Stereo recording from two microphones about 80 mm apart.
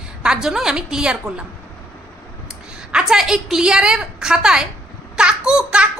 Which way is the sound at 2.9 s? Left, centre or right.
Centre.